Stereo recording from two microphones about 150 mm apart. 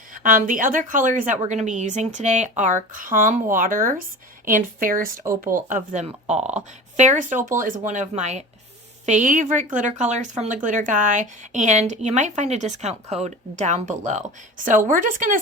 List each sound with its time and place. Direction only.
0.1 s a woman's voice: 65° right (ahead or behind)
5.5 s a woman's voice: 55° right (ahead or behind)